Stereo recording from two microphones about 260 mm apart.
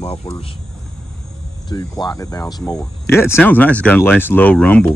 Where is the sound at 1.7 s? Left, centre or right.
Centre.